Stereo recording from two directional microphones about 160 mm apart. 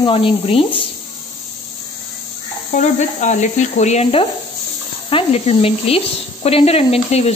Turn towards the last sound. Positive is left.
turn(degrees=40)  # may be behind; listen again after turning